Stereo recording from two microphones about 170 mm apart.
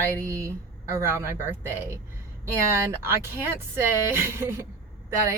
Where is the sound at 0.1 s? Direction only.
15° right (ahead or behind).